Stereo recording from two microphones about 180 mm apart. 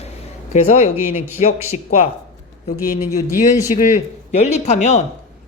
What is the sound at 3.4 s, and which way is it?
Speech, 40° left (ahead or behind).